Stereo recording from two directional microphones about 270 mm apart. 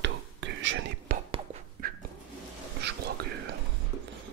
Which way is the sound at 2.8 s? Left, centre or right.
Right.